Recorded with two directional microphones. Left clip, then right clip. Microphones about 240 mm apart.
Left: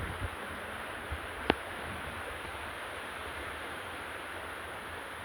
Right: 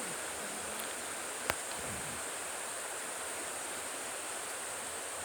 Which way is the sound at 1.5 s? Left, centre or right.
Right.